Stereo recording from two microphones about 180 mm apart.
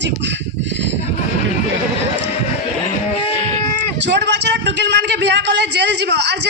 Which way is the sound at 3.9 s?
75° right (ahead or behind).